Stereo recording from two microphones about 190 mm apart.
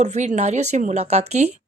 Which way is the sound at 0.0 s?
40° right (ahead or behind).